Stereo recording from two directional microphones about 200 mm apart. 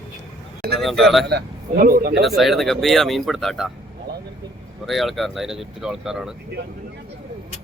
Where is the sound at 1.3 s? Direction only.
50° right (ahead or behind).